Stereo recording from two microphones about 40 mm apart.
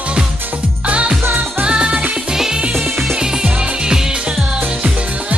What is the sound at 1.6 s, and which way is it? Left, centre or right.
Music, right.